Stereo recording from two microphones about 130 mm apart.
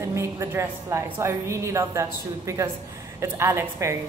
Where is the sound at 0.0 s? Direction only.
20° right (ahead or behind).